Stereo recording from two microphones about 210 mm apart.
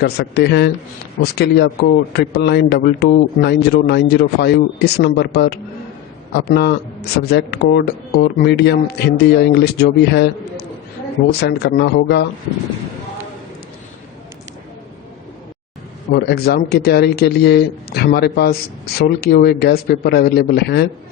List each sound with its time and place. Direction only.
0.0 s a man's voice: 50° left (ahead or behind)
16.1 s a man's voice: 50° left (ahead or behind)